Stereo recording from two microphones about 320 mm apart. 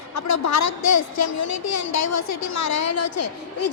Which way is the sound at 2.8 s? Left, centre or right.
Left.